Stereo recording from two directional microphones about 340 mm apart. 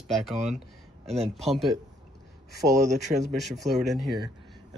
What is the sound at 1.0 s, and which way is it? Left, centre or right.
Speech, centre.